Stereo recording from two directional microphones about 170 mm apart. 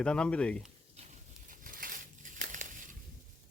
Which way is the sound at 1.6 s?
55° right (ahead or behind).